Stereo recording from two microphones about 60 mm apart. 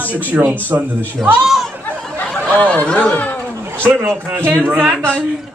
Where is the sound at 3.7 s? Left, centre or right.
Right.